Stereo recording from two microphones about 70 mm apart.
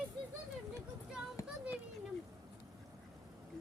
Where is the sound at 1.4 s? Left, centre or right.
Left.